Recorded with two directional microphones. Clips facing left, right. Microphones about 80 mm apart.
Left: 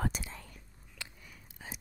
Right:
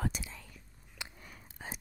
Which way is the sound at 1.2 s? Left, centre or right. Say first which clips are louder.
Right 3 dB; right.